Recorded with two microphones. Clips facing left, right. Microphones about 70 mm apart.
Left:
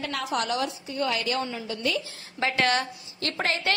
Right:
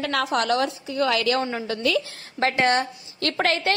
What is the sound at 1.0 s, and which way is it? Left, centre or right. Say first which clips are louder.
A woman's voice: right 5 dB; right.